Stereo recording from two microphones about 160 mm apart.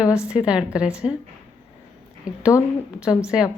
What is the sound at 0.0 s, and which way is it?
A woman's voice, 5° right (ahead or behind).